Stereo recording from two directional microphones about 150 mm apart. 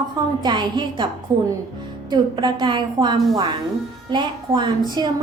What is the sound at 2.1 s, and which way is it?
A woman's voice, 30° right (ahead or behind).